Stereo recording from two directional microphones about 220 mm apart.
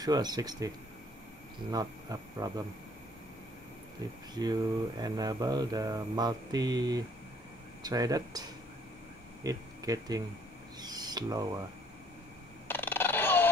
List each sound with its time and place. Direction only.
0.0 s mantra: 20° right (ahead or behind)
4.0 s mantra: 15° right (ahead or behind)
9.4 s speech: 15° right (ahead or behind)
10.8 s owl: 20° right (ahead or behind)
12.6 s dog: 10° left (ahead or behind)